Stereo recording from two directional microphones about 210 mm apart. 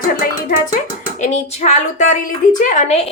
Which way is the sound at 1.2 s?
35° left (ahead or behind).